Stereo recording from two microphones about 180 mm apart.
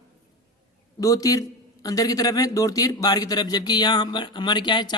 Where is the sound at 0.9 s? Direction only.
20° left (ahead or behind).